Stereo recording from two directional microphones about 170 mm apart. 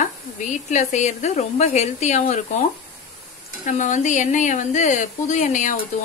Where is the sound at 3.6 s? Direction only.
45° left (ahead or behind).